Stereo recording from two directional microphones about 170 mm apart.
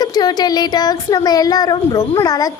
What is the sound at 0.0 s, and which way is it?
Speech, 25° left (ahead or behind).